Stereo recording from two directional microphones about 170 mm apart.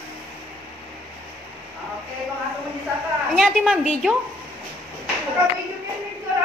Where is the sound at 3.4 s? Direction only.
5° right (ahead or behind).